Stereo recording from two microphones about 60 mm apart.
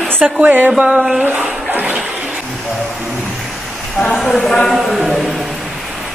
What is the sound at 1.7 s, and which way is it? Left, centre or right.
Water, right.